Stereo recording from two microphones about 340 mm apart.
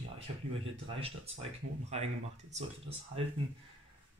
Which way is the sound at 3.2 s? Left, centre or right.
Centre.